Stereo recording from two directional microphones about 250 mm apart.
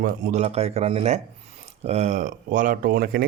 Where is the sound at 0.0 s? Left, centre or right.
Right.